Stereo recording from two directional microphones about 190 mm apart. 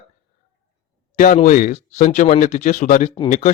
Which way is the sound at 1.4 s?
40° left (ahead or behind).